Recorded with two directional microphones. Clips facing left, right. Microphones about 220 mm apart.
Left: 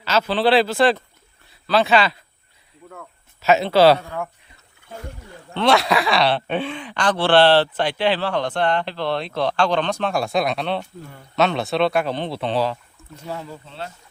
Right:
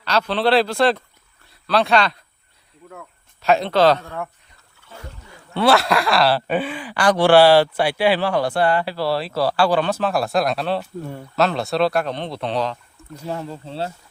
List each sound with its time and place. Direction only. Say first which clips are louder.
0.0 s speech: left 1 dB; 5° left (ahead or behind)
3.4 s a man's voice: left 2 dB; 5° left (ahead or behind)
5.5 s speech: right 1 dB; 5° right (ahead or behind)
13.7 s speech: right 7 dB; 35° right (ahead or behind)